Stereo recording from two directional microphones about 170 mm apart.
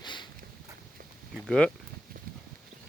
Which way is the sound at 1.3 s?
5° left (ahead or behind).